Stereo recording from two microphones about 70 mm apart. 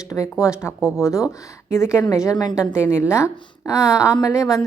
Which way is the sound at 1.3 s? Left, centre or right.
Left.